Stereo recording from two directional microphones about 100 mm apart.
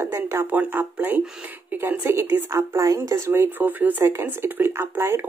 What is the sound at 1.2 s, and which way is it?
Speech, 5° right (ahead or behind).